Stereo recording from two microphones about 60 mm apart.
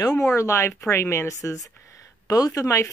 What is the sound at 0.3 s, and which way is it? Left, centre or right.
Speech, left.